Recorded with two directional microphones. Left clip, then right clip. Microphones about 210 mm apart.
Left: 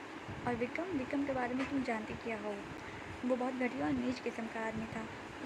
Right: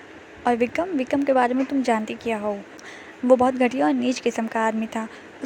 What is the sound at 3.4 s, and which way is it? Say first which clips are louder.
Speech: right 16 dB; 45° right (ahead or behind).